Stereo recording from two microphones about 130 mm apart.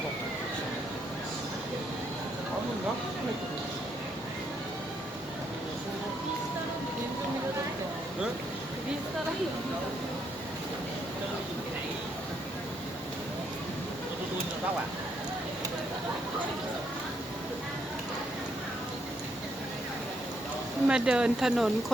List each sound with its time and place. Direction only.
20.8 s speech: 5° right (ahead or behind)